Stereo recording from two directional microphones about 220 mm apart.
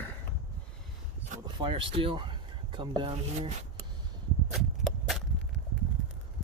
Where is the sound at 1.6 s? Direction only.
25° right (ahead or behind).